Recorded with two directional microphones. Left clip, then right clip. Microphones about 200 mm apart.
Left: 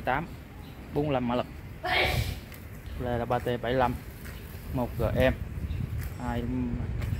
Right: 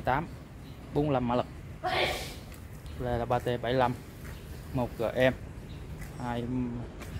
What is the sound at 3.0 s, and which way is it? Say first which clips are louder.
Speech: left 1 dB; 5° left (ahead or behind).